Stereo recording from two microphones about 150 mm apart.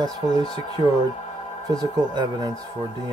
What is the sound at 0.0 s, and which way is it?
Speech, 25° right (ahead or behind).